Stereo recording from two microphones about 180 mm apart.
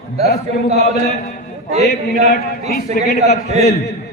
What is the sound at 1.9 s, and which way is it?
A man's voice, 55° left (ahead or behind).